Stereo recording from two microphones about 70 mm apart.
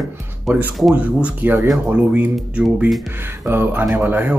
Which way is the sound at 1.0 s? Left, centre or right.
Centre.